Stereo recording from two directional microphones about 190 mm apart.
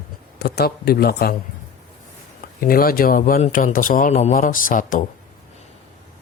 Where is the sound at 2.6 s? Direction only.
50° left (ahead or behind).